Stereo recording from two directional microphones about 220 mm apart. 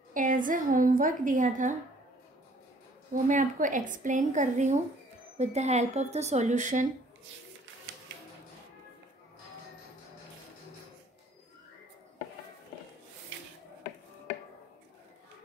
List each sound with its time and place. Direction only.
0.1 s a woman's voice: 35° right (ahead or behind)
3.1 s a woman's voice: 35° right (ahead or behind)